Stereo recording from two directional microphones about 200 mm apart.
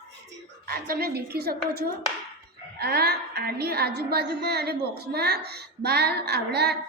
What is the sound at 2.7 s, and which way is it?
A woman's voice, 50° right (ahead or behind).